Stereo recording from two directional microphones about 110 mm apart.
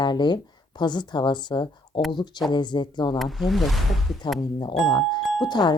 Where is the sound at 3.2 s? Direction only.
Centre (ahead or behind).